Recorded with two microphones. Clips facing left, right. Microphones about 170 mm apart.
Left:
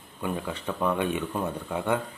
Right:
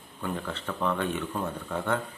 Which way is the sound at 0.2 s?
15° left (ahead or behind).